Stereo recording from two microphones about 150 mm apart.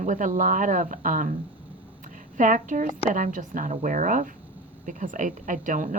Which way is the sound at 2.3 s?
60° right (ahead or behind).